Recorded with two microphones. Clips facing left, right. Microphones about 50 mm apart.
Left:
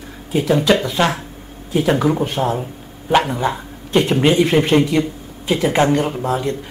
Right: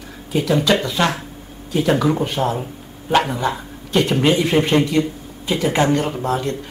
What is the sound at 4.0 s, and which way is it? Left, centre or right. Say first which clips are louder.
Speech: left 1 dB; centre.